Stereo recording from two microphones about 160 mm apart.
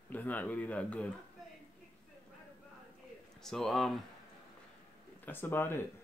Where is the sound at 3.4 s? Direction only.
Centre (ahead or behind).